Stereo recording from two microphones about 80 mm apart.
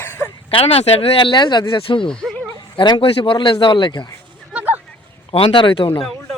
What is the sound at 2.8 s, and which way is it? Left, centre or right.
Speech, left.